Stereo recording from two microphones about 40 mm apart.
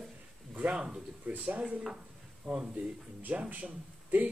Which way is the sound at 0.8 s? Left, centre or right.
Right.